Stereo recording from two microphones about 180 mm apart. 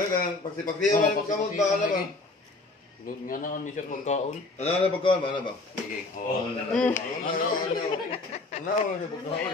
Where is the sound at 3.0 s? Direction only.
50° left (ahead or behind); by 5.4 s 25° left (ahead or behind).